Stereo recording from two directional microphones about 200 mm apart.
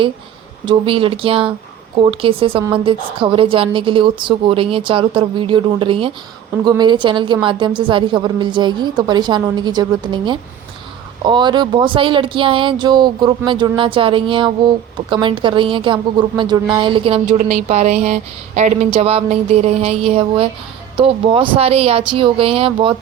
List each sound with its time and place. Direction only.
0.6 s a woman's voice: 25° right (ahead or behind)